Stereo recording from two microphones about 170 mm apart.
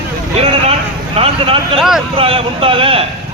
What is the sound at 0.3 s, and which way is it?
Vehicle, 35° right (ahead or behind).